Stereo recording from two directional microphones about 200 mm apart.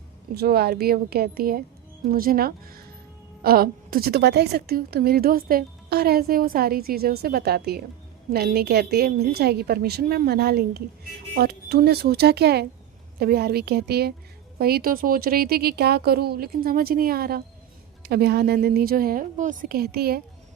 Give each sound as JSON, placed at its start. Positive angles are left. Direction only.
{"t": 0.3, "sound": "a woman's voice", "side_deg": -50}